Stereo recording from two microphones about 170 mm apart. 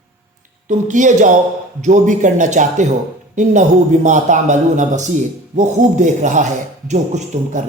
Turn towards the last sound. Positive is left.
turn(degrees=-45)  # may be behind; listen again after turning